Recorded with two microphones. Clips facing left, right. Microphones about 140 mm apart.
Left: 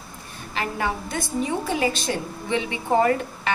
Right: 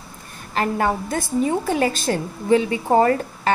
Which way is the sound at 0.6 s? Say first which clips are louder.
Right 6 dB; 45° right (ahead or behind).